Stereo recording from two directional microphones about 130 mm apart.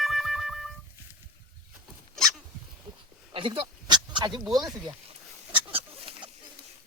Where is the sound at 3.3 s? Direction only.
40° right (ahead or behind).